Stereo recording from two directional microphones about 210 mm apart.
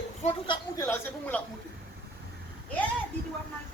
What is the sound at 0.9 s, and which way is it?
Speech, 5° left (ahead or behind).